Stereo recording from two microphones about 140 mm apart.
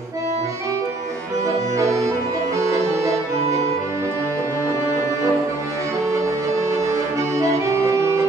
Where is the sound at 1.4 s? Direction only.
25° right (ahead or behind).